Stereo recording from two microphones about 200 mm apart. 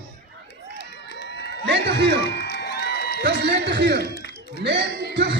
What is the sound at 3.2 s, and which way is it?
Music, 60° right (ahead or behind).